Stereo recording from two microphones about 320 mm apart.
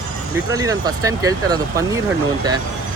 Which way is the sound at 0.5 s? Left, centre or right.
Centre.